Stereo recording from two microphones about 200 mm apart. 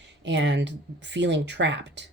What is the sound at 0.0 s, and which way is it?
Speech, 60° right (ahead or behind).